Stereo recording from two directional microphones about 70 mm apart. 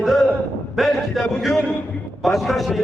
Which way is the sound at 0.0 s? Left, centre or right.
Centre.